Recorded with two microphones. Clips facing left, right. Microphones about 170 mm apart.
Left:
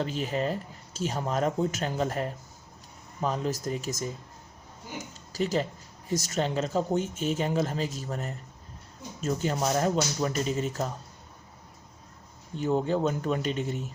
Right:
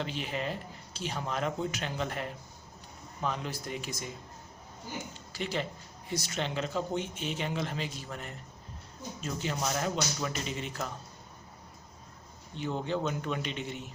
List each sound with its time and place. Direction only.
0.0 s speech: 40° left (ahead or behind)
5.3 s speech: 40° left (ahead or behind)
12.5 s speech: 45° left (ahead or behind)